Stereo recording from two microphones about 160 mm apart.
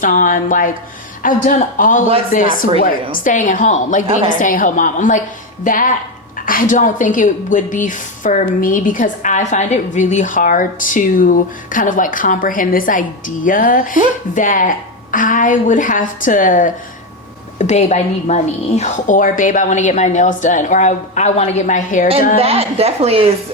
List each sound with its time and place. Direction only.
0.0 s a woman's voice: 55° left (ahead or behind)
22.4 s a woman's voice: 40° right (ahead or behind)